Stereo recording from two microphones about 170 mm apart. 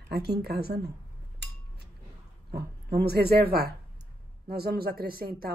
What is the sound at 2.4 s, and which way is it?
A woman's voice, 70° right (ahead or behind).